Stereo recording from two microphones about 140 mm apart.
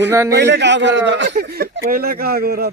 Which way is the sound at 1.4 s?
70° right (ahead or behind).